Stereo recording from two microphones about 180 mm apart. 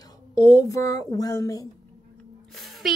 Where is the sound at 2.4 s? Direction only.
Centre (ahead or behind).